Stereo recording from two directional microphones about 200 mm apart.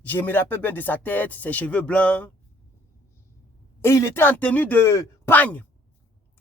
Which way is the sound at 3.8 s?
15° left (ahead or behind).